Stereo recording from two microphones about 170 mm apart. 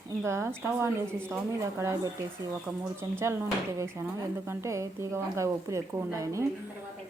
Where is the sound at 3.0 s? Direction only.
15° right (ahead or behind).